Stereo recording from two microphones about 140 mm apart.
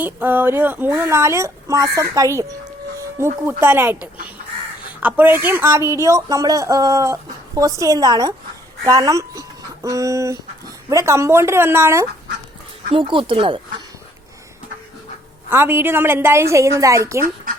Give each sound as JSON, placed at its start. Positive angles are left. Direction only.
{"t": 0.0, "sound": "a woman's voice", "side_deg": -15}
{"t": 12.9, "sound": "speech", "side_deg": -40}
{"t": 15.4, "sound": "a woman's voice", "side_deg": -15}